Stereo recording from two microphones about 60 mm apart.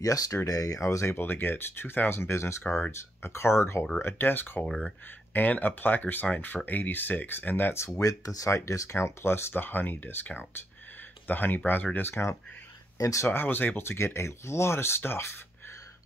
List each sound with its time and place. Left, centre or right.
0.0 s speech: left
1.1 s speech: left
4.0 s speech: left
4.6 s speech: centre
5.3 s speech: left
7.9 s speech: left
8.5 s speech: left
12.9 s speech: left
13.3 s speech: left